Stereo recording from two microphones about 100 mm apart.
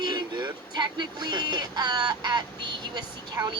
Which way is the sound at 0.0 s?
45° right (ahead or behind).